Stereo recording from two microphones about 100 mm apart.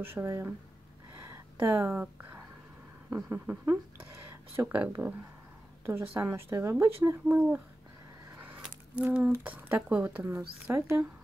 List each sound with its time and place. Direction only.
0.0 s speech: 20° right (ahead or behind)
1.2 s a sound: 25° right (ahead or behind)
3.3 s speech: 25° right (ahead or behind)
6.1 s speech: 25° right (ahead or behind)
8.5 s a sound: 10° right (ahead or behind)
9.3 s speech: 20° right (ahead or behind)